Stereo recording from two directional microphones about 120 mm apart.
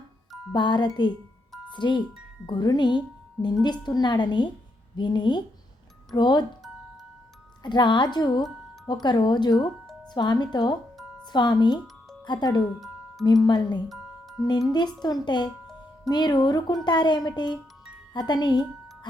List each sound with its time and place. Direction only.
0.5 s speech: 40° left (ahead or behind)
7.6 s speech: 40° left (ahead or behind)
10.9 s music: centre (ahead or behind)
11.3 s speech: 35° left (ahead or behind)
12.6 s music: centre (ahead or behind)
13.2 s speech: 35° left (ahead or behind)
13.8 s music: centre (ahead or behind)
14.7 s speech: 35° left (ahead or behind)